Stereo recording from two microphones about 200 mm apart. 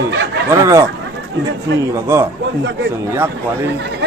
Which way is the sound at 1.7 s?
60° right (ahead or behind).